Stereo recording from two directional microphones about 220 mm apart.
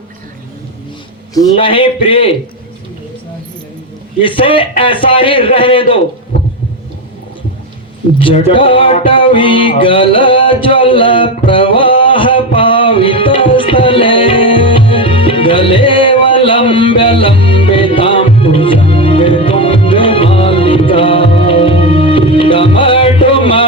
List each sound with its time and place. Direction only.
1.3 s a man's voice: 20° left (ahead or behind)
4.2 s a man's voice: 25° left (ahead or behind)
8.2 s music: 25° left (ahead or behind)